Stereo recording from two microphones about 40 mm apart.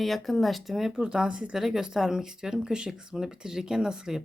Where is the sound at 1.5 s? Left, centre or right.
Centre.